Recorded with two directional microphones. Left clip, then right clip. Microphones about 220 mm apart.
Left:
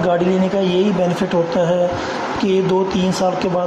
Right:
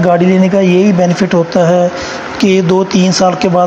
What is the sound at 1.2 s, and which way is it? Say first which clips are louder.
Speech: right 7 dB; 30° right (ahead or behind).